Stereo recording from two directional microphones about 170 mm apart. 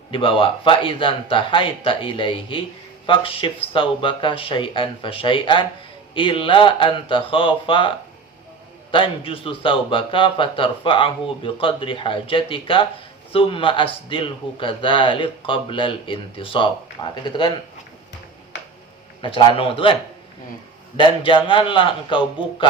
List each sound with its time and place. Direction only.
0.1 s a man's voice: 30° left (ahead or behind)
19.2 s a man's voice: 30° left (ahead or behind)